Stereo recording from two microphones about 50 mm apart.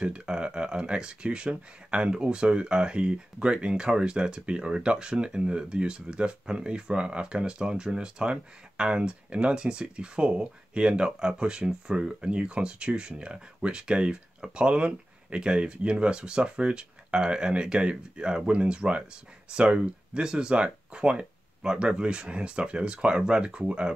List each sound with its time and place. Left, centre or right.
0.0 s speech: centre